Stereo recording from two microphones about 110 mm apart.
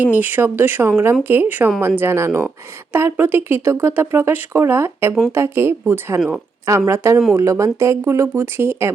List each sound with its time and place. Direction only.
0.0 s speech: 15° right (ahead or behind)